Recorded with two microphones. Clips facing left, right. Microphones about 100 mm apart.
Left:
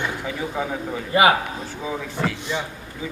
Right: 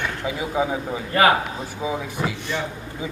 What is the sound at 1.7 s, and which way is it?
Speech, 15° right (ahead or behind).